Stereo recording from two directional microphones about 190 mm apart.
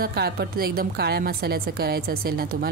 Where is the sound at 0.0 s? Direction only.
55° right (ahead or behind).